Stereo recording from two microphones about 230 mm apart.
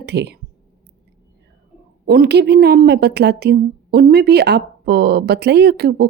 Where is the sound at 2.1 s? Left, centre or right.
Right.